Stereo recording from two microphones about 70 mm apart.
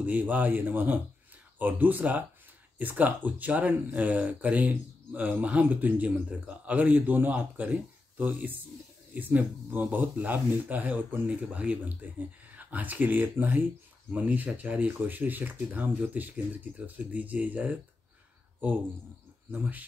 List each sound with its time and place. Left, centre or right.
0.0 s speech: right
19.5 s speech: right